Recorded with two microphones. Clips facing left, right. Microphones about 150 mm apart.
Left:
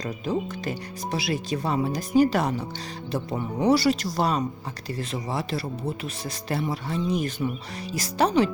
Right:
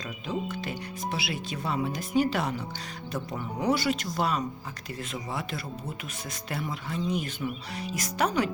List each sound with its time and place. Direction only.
0.3 s speech: 40° left (ahead or behind)
3.1 s speech: 30° left (ahead or behind)